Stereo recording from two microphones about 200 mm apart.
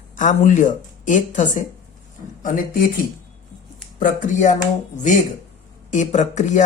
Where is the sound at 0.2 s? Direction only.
40° left (ahead or behind).